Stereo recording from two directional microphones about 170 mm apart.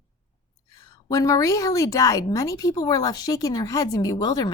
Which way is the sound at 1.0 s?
20° left (ahead or behind).